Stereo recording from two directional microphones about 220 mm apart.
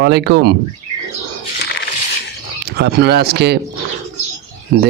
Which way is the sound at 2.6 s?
50° right (ahead or behind).